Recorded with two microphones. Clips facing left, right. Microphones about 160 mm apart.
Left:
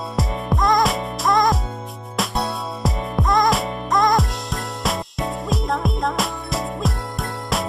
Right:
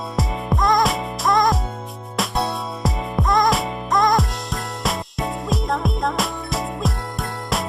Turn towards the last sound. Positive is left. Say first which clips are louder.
# even
turn(degrees=0)  # may be behind; listen again after turning